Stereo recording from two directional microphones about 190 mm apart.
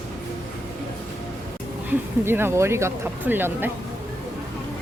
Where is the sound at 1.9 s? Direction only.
10° right (ahead or behind).